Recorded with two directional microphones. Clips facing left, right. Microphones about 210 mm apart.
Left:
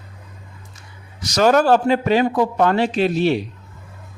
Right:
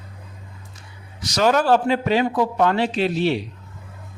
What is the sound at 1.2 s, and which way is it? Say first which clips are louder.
Speech: left 3 dB; 45° left (ahead or behind).